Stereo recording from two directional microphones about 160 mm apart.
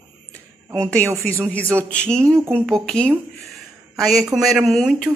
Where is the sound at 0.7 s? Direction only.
10° left (ahead or behind).